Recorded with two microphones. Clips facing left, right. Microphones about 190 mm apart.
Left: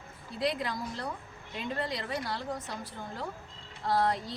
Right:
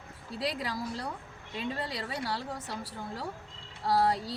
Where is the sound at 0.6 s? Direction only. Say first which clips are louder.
Even; 35° right (ahead or behind).